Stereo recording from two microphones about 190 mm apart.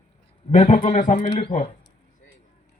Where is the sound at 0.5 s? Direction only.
40° left (ahead or behind).